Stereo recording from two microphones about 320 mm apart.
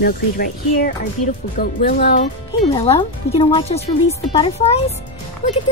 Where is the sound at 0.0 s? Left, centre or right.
Left.